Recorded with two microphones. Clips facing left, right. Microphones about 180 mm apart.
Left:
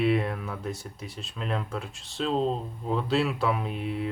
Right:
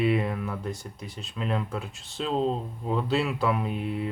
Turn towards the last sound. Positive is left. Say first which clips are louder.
# right 1 dB
turn(degrees=0)  # may be behind; listen again after turning